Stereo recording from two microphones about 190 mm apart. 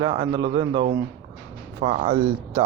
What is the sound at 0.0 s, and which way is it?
Speech, 25° right (ahead or behind).